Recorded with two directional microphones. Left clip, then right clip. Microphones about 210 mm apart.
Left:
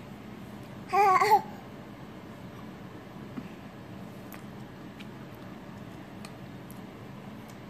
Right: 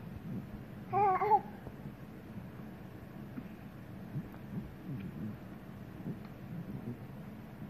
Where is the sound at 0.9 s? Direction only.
15° left (ahead or behind).